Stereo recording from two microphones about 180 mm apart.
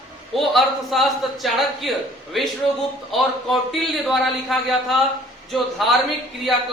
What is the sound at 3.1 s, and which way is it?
A man's voice, centre (ahead or behind).